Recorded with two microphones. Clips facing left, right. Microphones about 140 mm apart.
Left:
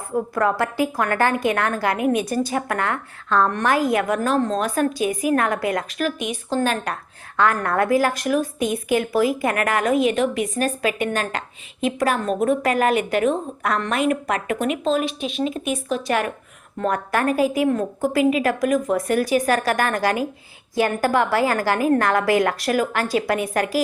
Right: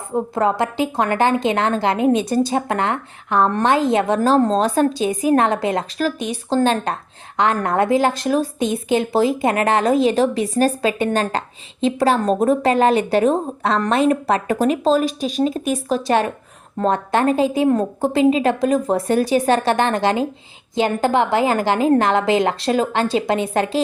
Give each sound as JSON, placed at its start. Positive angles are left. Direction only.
{"t": 0.1, "sound": "a woman's voice", "side_deg": -20}